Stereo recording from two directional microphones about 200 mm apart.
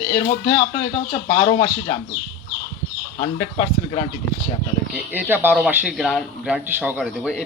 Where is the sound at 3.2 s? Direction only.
30° left (ahead or behind).